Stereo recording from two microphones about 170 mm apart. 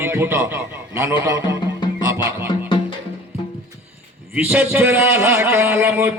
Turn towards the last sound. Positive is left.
turn(degrees=-10)  # may be behind; listen again after turning